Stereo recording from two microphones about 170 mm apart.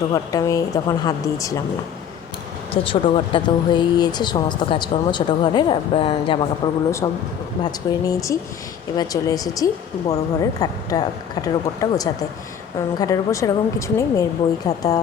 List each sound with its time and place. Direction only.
0.1 s speech: 20° left (ahead or behind)
2.7 s speech: 30° left (ahead or behind)